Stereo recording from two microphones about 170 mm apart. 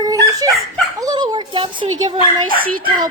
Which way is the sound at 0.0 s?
20° right (ahead or behind).